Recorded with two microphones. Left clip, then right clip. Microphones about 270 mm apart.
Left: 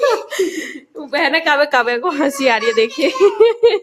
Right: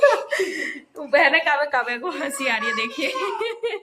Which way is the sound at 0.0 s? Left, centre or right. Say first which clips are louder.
Left 2 dB; centre.